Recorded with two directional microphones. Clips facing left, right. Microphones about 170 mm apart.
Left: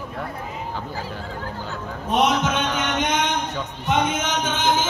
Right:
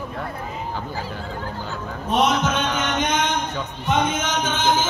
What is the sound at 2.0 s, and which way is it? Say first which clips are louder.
A man's voice: even; 15° left (ahead or behind).